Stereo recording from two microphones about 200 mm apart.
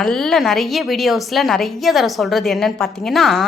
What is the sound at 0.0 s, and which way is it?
A woman's voice, centre (ahead or behind).